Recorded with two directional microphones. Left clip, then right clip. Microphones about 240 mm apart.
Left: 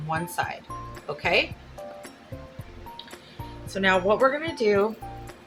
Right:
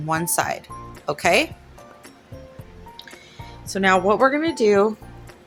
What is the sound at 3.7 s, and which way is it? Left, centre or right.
Speech, right.